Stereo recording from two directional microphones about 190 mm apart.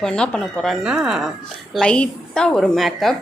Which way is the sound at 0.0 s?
5° left (ahead or behind).